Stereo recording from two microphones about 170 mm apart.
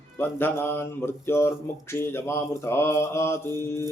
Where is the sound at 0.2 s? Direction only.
10° left (ahead or behind).